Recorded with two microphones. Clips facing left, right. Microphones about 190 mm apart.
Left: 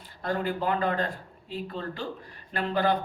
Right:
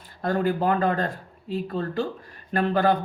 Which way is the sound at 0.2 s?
45° right (ahead or behind).